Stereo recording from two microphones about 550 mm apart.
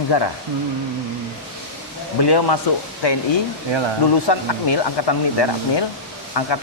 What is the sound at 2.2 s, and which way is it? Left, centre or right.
Speech, left.